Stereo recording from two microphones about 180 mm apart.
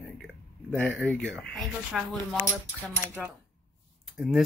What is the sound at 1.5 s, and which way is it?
Speech, centre (ahead or behind).